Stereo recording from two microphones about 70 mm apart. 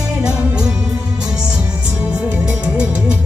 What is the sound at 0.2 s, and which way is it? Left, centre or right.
Music, centre.